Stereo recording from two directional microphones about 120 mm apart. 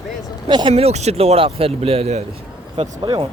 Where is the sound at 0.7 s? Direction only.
60° right (ahead or behind).